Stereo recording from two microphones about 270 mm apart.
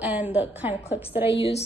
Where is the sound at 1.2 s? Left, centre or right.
Left.